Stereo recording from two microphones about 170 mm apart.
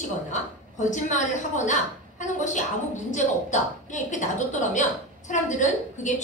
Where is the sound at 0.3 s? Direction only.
45° left (ahead or behind).